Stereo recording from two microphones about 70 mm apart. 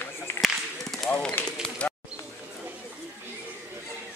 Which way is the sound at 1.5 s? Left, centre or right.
Centre.